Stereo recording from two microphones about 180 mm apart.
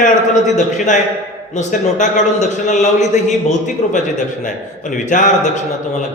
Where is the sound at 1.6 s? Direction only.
45° left (ahead or behind).